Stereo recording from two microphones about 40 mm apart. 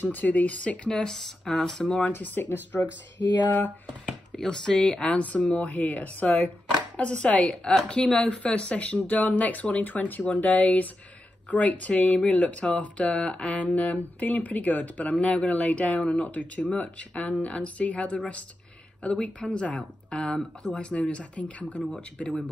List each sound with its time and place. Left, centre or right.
0.0 s speech: left
0.8 s speech: centre
2.4 s speech: left
4.4 s speech: centre
5.1 s speech: left
7.0 s speech: left
7.9 s speech: centre
8.4 s speech: left
13.2 s speech: left
13.5 s speech: left